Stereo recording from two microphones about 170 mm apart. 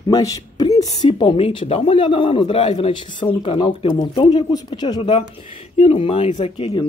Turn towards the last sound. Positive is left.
turn(degrees=30)  # may be behind; listen again after turning